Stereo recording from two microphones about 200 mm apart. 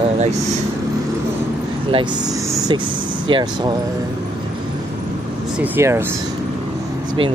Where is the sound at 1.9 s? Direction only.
20° right (ahead or behind).